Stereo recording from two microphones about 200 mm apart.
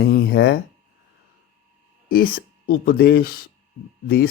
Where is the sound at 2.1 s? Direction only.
50° left (ahead or behind).